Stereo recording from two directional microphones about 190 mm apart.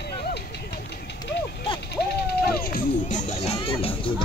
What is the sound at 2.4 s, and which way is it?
Music, 50° left (ahead or behind).